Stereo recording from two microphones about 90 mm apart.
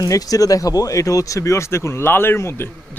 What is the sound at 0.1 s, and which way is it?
Speech, 40° left (ahead or behind).